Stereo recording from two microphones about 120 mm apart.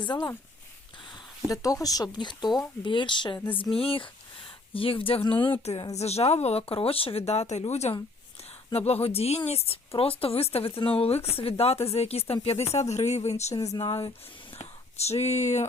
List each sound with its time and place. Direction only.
0.0 s speech: 40° left (ahead or behind)
1.5 s a woman's voice: 30° left (ahead or behind); by 5.5 s 45° left (ahead or behind)
5.9 s a woman's voice: 60° left (ahead or behind)
12.9 s speech: 70° left (ahead or behind)
13.7 s a woman's voice: 45° left (ahead or behind)
14.6 s speech: 60° left (ahead or behind)